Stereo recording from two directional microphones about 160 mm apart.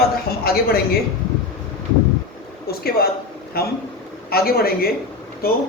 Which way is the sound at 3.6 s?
75° left (ahead or behind).